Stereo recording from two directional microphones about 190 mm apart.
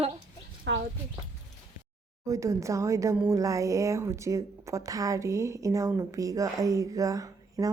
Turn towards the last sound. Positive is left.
turn(degrees=-20)  # may be behind; listen again after turning